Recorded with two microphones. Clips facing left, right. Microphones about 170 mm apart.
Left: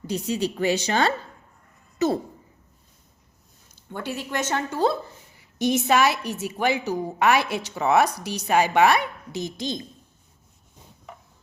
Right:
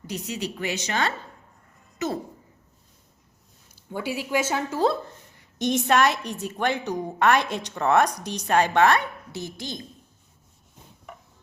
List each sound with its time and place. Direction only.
0.1 s a woman's voice: 30° left (ahead or behind)
3.7 s a woman's voice: 10° right (ahead or behind); by 9.8 s 20° left (ahead or behind)